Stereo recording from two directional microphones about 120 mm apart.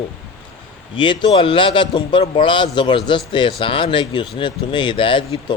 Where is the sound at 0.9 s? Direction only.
40° left (ahead or behind).